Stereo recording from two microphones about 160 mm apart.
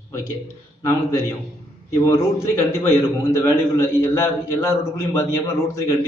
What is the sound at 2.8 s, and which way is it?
A man's voice, 15° left (ahead or behind).